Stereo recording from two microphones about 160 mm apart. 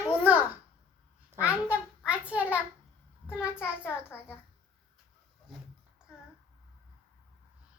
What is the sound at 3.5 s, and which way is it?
Speech, 15° left (ahead or behind).